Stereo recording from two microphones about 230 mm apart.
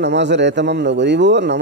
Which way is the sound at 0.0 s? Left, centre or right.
Right.